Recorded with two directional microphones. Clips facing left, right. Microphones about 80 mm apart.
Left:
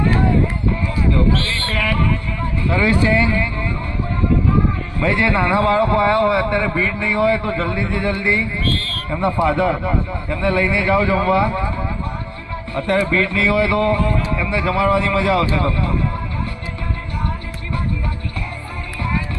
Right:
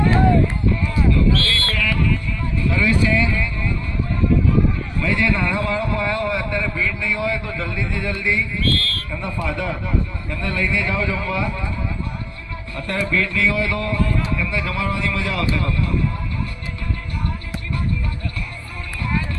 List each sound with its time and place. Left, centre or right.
1.1 s a sound: left
1.7 s music: left
2.6 s a man's voice: left
4.9 s a man's voice: left
9.0 s a man's voice: left
12.7 s a man's voice: left